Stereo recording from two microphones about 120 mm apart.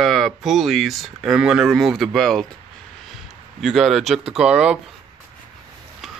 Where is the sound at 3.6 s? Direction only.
Centre (ahead or behind).